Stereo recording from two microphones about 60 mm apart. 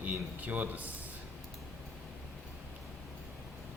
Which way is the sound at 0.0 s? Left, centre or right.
Right.